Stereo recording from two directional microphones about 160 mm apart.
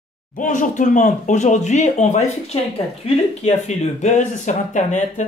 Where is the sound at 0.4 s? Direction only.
50° left (ahead or behind).